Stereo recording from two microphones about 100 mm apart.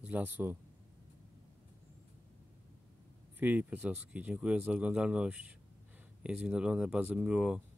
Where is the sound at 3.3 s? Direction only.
15° right (ahead or behind).